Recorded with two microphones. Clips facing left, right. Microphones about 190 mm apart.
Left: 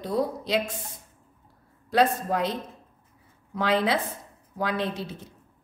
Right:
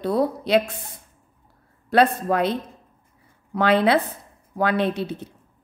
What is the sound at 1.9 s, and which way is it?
A woman's voice, 65° right (ahead or behind).